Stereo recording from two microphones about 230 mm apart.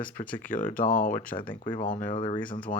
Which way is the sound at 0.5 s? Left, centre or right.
Left.